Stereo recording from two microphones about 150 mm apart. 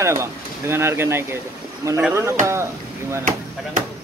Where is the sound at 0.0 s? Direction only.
20° right (ahead or behind).